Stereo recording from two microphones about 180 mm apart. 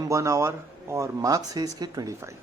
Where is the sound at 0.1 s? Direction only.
15° right (ahead or behind).